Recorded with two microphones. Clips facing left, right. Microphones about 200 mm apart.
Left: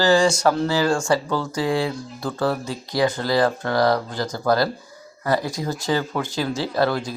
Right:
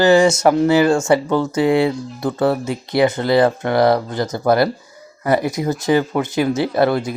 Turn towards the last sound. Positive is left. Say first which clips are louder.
# right 5 dB
turn(degrees=-20)  # may be behind; listen again after turning